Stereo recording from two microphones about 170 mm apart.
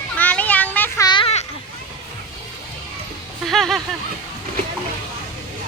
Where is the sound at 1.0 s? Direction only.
30° left (ahead or behind).